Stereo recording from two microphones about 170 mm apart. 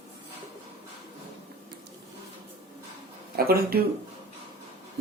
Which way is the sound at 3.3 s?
60° right (ahead or behind).